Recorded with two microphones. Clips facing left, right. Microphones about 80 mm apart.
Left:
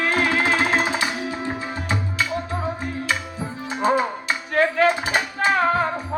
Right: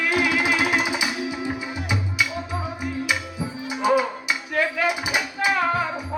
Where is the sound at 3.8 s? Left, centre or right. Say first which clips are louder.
Even; left.